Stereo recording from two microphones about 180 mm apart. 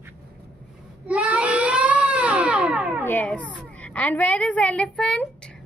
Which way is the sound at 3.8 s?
10° left (ahead or behind).